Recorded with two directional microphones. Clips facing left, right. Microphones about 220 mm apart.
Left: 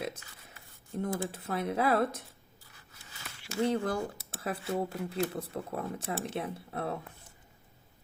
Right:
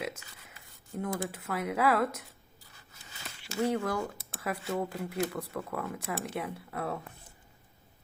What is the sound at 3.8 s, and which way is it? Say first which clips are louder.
Speech: even; 30° left (ahead or behind).